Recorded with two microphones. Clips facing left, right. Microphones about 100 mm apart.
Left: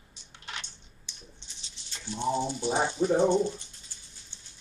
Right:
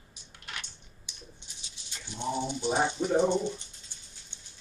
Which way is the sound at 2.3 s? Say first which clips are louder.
Right 2 dB; 15° right (ahead or behind).